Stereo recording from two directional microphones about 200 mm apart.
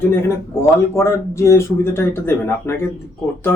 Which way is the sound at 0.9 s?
15° left (ahead or behind).